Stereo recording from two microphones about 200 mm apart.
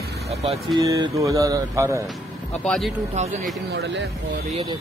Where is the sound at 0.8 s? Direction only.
15° right (ahead or behind).